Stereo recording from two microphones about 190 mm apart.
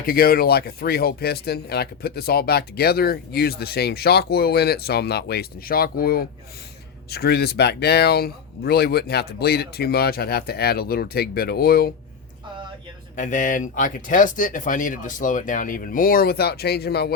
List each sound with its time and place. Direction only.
0.0 s speech: 50° left (ahead or behind)
13.1 s speech: 40° left (ahead or behind)